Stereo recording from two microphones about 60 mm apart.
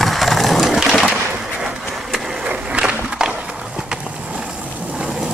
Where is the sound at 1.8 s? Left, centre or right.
Centre.